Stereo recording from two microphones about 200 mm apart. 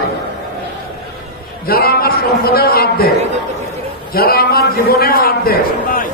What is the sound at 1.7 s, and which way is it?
A man's voice, 50° left (ahead or behind).